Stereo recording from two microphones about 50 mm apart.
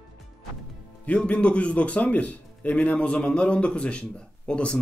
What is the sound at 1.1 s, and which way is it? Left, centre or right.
Speech, left.